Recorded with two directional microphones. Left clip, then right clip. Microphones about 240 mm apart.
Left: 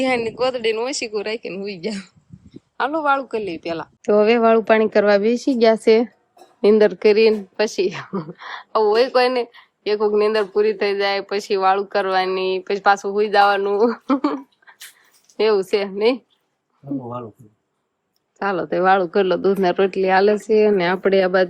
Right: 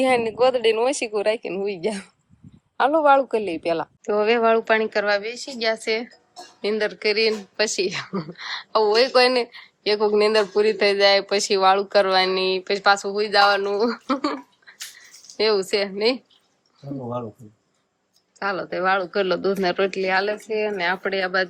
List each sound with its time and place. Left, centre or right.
0.0 s speech: centre
4.0 s speech: left
18.3 s speech: centre